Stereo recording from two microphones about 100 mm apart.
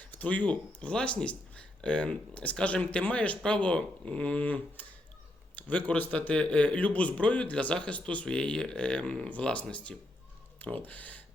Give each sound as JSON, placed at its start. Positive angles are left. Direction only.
{"t": 0.0, "sound": "speech", "side_deg": 15}